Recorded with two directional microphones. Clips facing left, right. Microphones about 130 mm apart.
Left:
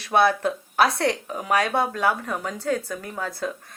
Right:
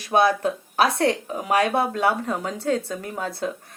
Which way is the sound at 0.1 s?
15° right (ahead or behind).